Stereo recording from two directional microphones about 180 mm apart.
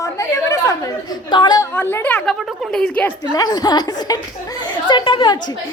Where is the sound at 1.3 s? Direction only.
25° left (ahead or behind).